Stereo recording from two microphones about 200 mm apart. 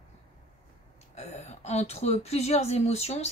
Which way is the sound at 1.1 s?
35° left (ahead or behind).